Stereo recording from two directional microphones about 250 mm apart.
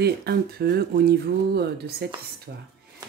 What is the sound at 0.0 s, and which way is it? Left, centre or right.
A woman's voice, right.